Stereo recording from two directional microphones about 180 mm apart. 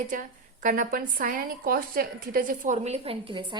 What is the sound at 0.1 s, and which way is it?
A woman's voice, 45° right (ahead or behind).